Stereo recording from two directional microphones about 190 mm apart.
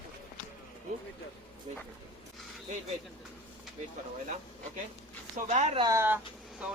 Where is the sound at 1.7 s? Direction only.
30° right (ahead or behind).